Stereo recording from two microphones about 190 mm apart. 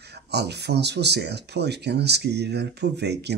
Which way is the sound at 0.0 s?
60° right (ahead or behind).